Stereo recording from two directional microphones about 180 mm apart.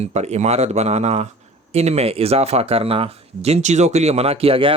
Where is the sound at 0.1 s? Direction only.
40° right (ahead or behind).